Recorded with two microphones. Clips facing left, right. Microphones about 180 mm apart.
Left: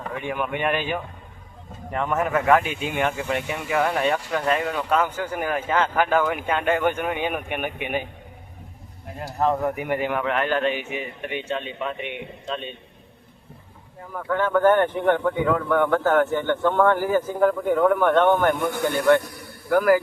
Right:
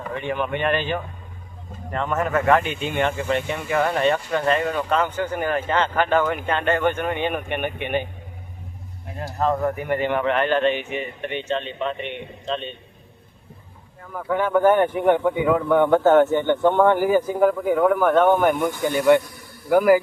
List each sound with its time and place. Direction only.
0.1 s a man's voice: 5° left (ahead or behind)
9.1 s a man's voice: 5° left (ahead or behind)
14.1 s speech: centre (ahead or behind)
14.3 s speech: 10° right (ahead or behind)